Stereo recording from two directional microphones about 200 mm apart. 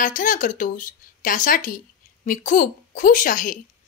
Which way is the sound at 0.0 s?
40° left (ahead or behind).